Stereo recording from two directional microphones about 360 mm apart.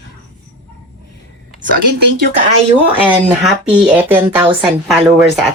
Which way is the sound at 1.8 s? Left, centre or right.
Right.